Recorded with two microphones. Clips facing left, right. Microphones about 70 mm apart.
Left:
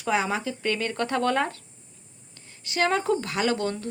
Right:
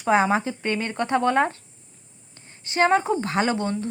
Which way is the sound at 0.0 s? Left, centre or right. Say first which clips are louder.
Right 6 dB; right.